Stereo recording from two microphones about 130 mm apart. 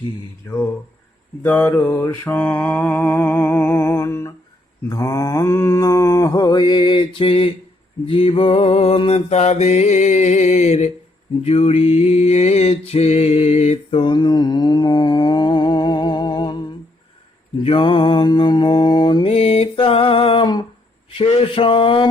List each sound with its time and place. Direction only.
1.4 s mantra: 15° left (ahead or behind)
4.9 s speech: 25° left (ahead or behind)
6.3 s mantra: 35° left (ahead or behind)
21.1 s a sound: 50° left (ahead or behind)